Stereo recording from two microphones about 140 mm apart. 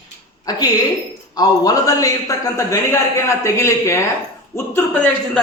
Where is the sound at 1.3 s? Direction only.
25° left (ahead or behind).